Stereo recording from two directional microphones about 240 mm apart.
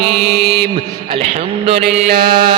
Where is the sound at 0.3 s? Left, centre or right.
Centre.